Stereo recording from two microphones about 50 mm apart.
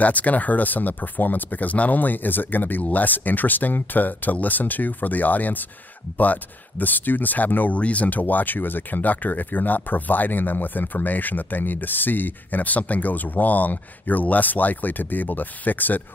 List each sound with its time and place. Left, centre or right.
0.0 s speech: left